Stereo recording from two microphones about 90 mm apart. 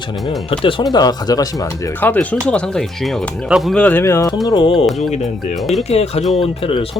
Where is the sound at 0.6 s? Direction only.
75° left (ahead or behind).